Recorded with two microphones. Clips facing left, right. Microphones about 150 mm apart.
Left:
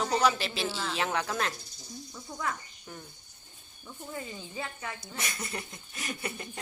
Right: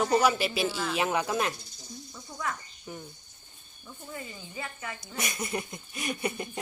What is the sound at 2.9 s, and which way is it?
Speech, 10° right (ahead or behind).